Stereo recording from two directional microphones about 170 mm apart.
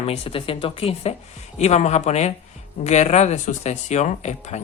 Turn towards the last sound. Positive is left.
turn(degrees=40)  # may be behind; listen again after turning